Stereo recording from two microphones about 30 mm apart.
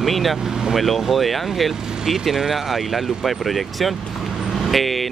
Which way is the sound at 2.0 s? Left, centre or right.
Centre.